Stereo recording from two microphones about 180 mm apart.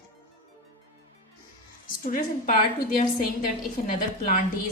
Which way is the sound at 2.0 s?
50° left (ahead or behind).